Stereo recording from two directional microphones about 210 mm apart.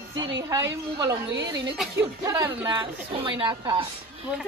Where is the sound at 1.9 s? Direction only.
15° right (ahead or behind).